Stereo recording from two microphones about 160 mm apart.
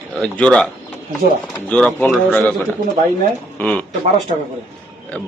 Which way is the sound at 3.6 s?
10° left (ahead or behind).